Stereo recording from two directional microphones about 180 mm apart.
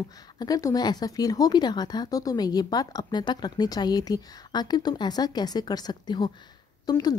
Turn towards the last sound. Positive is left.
turn(degrees=20)  # may be behind; listen again after turning